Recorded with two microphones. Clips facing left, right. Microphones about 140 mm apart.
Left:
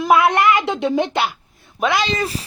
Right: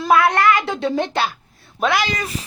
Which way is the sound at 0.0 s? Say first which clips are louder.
Left 1 dB; 20° left (ahead or behind).